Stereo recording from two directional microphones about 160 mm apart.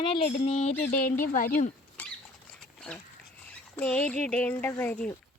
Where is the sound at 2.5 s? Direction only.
5° left (ahead or behind).